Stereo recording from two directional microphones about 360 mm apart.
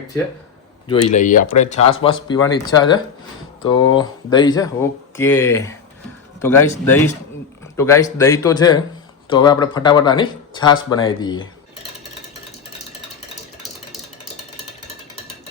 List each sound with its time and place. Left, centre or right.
0.9 s speech: centre